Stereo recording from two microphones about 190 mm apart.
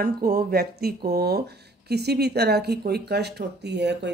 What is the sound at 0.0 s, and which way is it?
Speech, 50° right (ahead or behind).